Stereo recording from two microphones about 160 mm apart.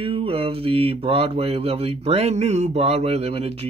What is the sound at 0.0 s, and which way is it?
Speech, 35° right (ahead or behind).